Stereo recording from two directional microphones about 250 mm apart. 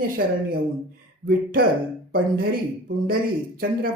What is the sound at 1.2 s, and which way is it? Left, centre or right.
Speech, right.